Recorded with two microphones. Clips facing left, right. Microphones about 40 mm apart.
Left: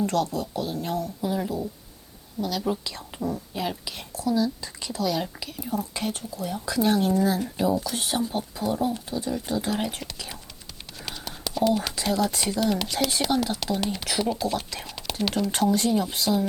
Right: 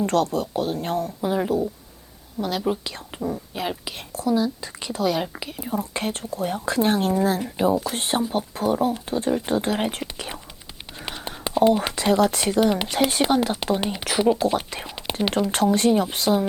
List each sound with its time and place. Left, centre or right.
0.0 s speech: right
3.2 s speech: centre; by 10.0 s right
11.0 s speech: right
15.5 s speech: right